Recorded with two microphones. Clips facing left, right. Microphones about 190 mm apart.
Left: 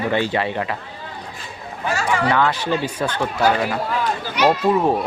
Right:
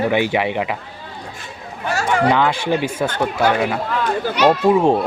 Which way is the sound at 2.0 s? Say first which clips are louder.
Right 4 dB; 50° right (ahead or behind).